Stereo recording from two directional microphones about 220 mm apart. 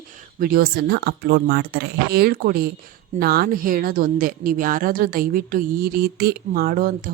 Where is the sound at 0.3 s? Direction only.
40° right (ahead or behind).